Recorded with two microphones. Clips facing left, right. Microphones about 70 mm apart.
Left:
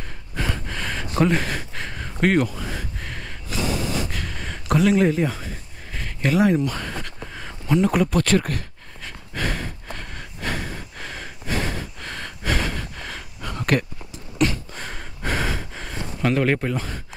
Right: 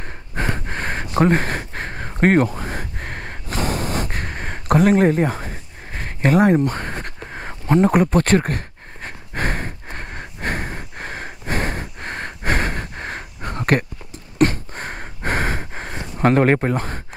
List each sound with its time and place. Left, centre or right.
0.4 s gasp: right